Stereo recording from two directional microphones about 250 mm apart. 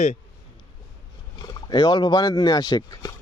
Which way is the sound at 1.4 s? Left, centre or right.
Centre.